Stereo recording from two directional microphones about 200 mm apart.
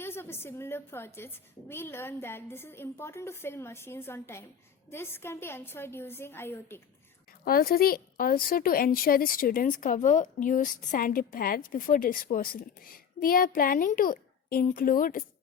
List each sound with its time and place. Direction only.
0.0 s a woman's voice: 10° left (ahead or behind)
7.4 s a woman's voice: 45° left (ahead or behind)